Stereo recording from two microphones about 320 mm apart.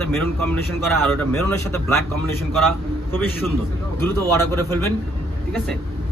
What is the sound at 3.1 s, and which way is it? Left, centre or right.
A man's voice, centre.